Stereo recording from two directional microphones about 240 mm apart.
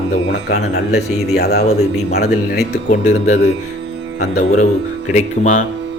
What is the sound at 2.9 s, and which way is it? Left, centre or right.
Speech, left.